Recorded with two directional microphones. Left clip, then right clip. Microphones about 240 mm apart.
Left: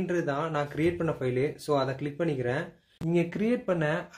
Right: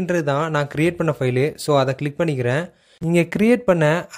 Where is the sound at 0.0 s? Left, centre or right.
Right.